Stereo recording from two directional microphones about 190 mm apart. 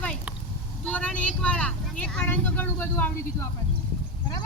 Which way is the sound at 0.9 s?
5° left (ahead or behind).